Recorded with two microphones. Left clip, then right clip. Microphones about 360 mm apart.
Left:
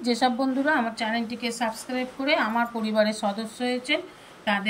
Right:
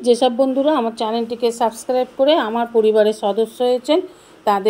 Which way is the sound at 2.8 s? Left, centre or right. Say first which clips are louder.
Right 10 dB; right.